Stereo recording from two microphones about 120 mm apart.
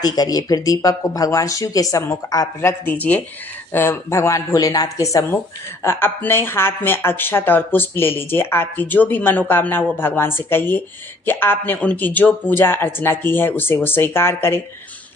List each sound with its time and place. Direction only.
0.0 s speech: 30° left (ahead or behind)
2.8 s speech: 15° left (ahead or behind)